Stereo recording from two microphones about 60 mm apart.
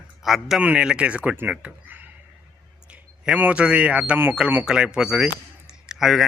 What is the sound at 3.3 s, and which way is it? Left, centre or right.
A man's voice, right.